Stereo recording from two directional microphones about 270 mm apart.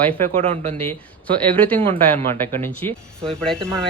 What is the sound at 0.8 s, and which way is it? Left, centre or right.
Speech, centre.